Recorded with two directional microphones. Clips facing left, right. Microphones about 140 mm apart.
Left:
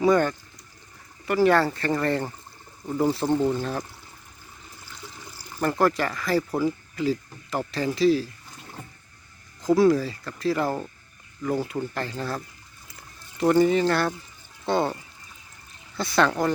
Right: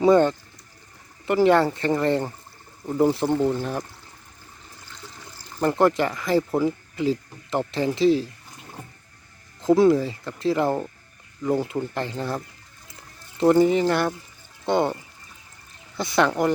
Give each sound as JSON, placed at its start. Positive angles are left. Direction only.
{"t": 0.0, "sound": "speech", "side_deg": -25}
{"t": 4.9, "sound": "toilet flush", "side_deg": 10}
{"t": 5.5, "sound": "speech", "side_deg": -20}
{"t": 9.6, "sound": "speech", "side_deg": -25}
{"t": 16.0, "sound": "speech", "side_deg": -20}